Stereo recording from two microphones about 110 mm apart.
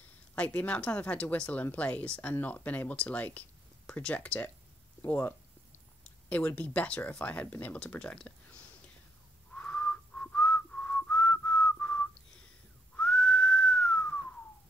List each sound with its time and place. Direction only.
0.4 s speech: 10° left (ahead or behind)
5.0 s a sound: 15° left (ahead or behind)
6.2 s speech: 15° left (ahead or behind)
9.5 s whistling: 15° left (ahead or behind)